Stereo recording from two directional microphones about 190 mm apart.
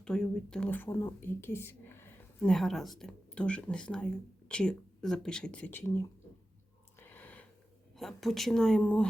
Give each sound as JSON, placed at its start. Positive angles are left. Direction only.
{"t": 0.0, "sound": "speech", "side_deg": 5}
{"t": 7.0, "sound": "a sound", "side_deg": 10}
{"t": 7.9, "sound": "speech", "side_deg": 0}